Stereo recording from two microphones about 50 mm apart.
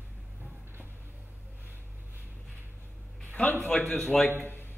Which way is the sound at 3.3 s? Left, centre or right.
Left.